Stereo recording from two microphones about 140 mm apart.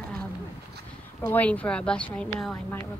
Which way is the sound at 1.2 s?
10° left (ahead or behind).